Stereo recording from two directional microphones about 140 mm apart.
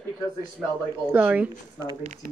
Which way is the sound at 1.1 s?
10° right (ahead or behind).